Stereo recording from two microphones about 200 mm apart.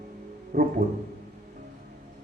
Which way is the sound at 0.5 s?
45° right (ahead or behind).